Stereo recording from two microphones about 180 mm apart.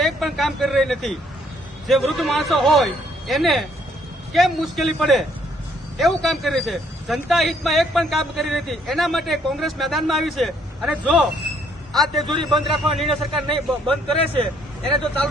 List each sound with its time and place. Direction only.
0.0 s speech: centre (ahead or behind)
12.2 s a man's voice: 25° right (ahead or behind)
12.6 s speech: centre (ahead or behind)
15.0 s speech: 5° left (ahead or behind)